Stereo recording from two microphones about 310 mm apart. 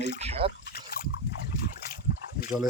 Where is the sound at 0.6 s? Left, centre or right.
Left.